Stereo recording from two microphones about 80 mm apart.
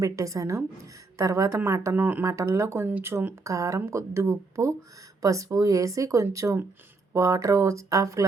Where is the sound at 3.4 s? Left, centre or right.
Right.